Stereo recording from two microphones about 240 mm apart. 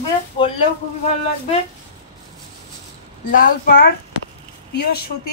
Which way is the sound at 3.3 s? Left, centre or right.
Left.